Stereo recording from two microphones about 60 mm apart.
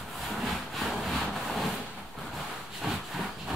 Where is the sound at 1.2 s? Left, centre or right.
Centre.